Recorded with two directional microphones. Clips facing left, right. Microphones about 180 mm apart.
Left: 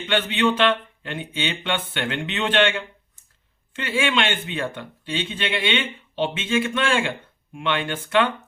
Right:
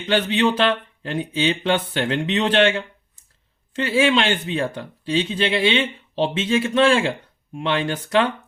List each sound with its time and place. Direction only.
0.0 s speech: 40° right (ahead or behind)